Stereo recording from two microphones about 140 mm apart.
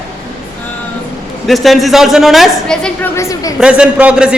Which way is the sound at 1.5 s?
Centre (ahead or behind).